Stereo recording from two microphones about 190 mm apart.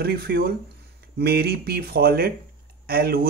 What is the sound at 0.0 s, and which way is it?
Speech, 55° right (ahead or behind).